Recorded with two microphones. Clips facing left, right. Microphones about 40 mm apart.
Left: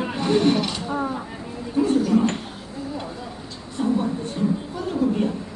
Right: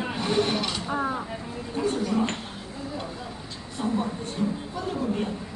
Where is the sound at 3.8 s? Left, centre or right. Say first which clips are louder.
Left 6 dB; centre.